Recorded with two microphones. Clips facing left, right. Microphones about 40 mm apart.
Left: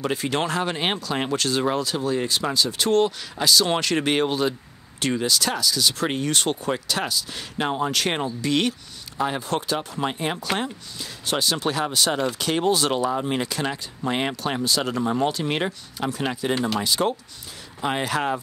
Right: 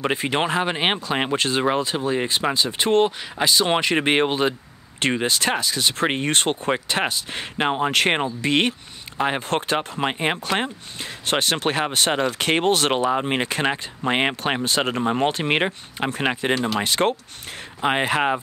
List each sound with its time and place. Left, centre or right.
0.0 s speech: right
17.8 s speech: right